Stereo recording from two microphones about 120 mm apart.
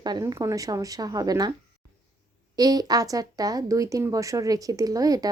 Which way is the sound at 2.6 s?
30° right (ahead or behind).